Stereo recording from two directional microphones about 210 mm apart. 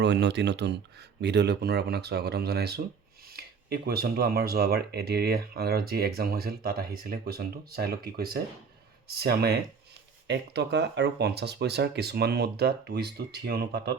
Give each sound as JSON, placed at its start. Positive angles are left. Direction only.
{"t": 0.0, "sound": "speech", "side_deg": -55}